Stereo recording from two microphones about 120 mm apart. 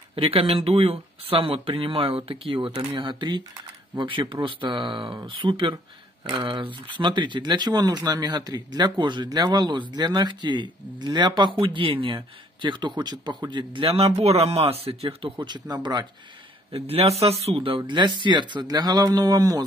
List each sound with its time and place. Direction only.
0.1 s speech: 50° right (ahead or behind)
15.4 s speech: 35° right (ahead or behind)
16.7 s speech: 55° right (ahead or behind); by 19.6 s 30° right (ahead or behind)